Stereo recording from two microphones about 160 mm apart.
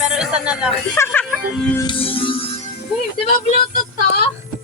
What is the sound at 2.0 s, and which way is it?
Music, 35° left (ahead or behind).